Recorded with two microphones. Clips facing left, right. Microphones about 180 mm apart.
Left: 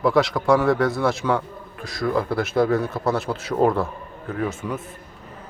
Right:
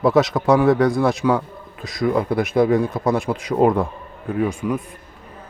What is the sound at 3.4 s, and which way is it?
Speech, 15° right (ahead or behind).